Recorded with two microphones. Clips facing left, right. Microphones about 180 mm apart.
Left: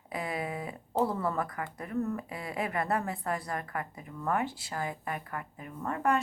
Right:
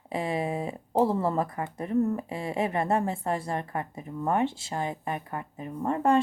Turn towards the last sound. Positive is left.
turn(degrees=-25)  # may be behind; listen again after turning